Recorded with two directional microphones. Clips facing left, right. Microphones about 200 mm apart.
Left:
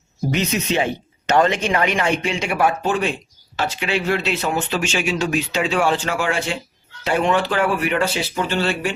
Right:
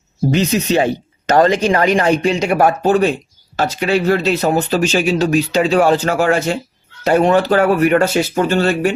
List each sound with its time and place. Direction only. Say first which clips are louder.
0.3 s speech: right 6 dB; 35° right (ahead or behind)